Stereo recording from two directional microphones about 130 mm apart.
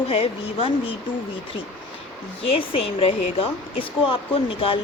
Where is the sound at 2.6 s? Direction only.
45° left (ahead or behind).